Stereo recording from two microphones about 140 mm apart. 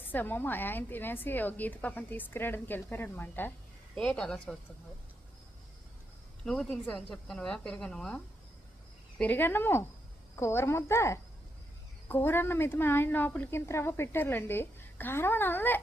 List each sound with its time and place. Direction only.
0.0 s a woman's voice: 15° left (ahead or behind)
6.4 s a woman's voice: 5° left (ahead or behind)